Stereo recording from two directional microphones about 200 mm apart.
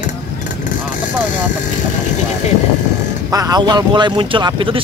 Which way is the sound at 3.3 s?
20° right (ahead or behind).